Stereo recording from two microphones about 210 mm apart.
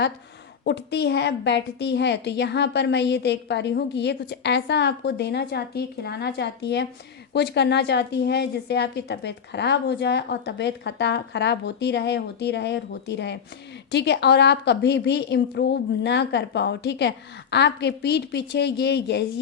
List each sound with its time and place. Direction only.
0.6 s a woman's voice: 50° left (ahead or behind)